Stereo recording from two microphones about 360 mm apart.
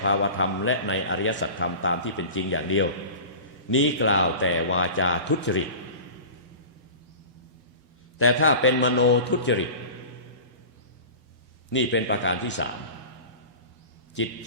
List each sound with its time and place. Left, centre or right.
0.0 s a man's voice: left
8.2 s a man's voice: left
11.7 s a man's voice: left